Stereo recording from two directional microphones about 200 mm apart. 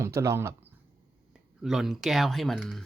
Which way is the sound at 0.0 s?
15° right (ahead or behind).